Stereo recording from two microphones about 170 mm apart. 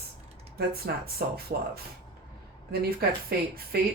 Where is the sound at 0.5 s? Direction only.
65° right (ahead or behind).